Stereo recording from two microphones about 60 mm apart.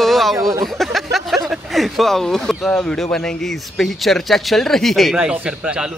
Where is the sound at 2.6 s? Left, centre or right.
Centre.